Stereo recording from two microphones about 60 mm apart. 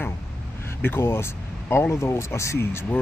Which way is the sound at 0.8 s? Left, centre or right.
Left.